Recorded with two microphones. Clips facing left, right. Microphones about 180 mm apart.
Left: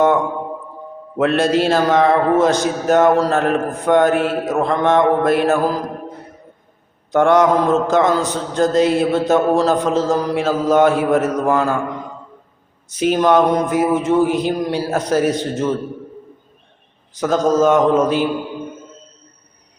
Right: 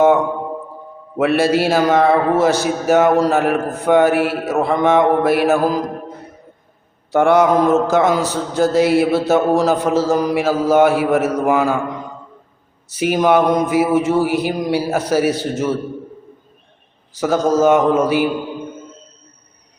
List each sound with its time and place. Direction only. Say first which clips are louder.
1.4 s a man's voice: even; 5° right (ahead or behind)
7.1 s a man's voice: even; 10° right (ahead or behind)
12.9 s a man's voice: even; 10° right (ahead or behind)
17.2 s a man's voice: even; 10° right (ahead or behind)